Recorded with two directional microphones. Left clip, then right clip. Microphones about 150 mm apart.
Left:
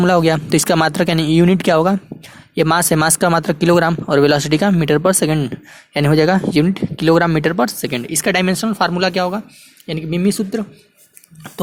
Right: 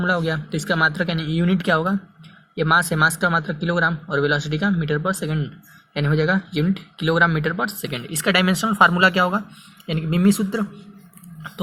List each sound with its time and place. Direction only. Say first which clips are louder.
0.0 s speech: left 8 dB; 85° left; by 2.0 s 55° left (ahead or behind)
2.6 s speech: left 1 dB; 80° left; by 5.5 s 60° left (ahead or behind)
6.2 s speech: left 7 dB; 90° left
6.7 s speech: left 2 dB; 60° left (ahead or behind)
8.3 s speech: left 1 dB; 35° left (ahead or behind)